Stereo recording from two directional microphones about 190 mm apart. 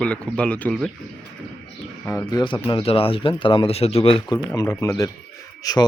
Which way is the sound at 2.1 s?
15° left (ahead or behind).